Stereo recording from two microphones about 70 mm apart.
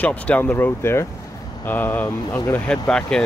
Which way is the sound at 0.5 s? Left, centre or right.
Left.